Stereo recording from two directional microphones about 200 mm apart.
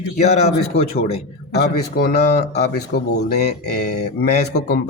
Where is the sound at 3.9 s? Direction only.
55° left (ahead or behind).